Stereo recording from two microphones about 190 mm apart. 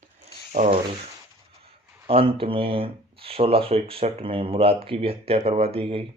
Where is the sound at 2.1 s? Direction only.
30° right (ahead or behind).